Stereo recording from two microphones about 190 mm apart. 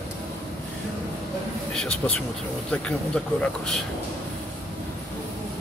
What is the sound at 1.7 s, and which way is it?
Speech, 5° left (ahead or behind).